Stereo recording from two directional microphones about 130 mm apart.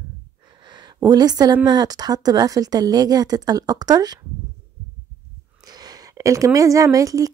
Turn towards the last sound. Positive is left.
turn(degrees=-25)  # may be behind; listen again after turning